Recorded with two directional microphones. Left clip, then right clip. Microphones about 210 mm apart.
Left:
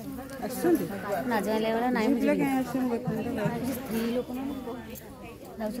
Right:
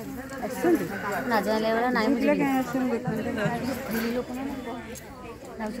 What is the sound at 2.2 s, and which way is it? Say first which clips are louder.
Speech: right 3 dB; centre (ahead or behind).